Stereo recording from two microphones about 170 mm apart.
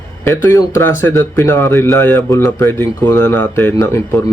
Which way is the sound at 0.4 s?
15° left (ahead or behind).